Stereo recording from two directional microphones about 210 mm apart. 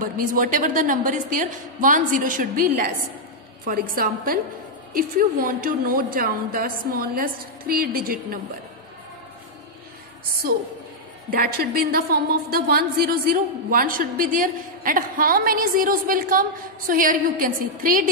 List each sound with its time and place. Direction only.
0.0 s a woman's voice: 40° right (ahead or behind)
11.2 s a woman's voice: 45° right (ahead or behind)